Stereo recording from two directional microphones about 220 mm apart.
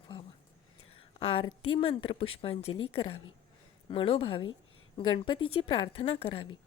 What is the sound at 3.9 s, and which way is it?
A woman's voice, 25° left (ahead or behind).